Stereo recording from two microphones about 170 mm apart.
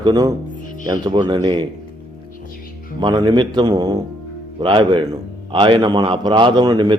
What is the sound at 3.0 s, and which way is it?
A man's voice, 25° right (ahead or behind).